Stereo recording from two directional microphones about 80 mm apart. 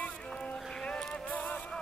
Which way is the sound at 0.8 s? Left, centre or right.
Centre.